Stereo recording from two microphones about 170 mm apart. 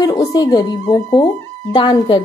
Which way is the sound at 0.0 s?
20° left (ahead or behind).